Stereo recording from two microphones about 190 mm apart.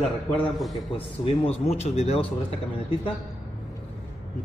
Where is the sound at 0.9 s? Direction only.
30° left (ahead or behind).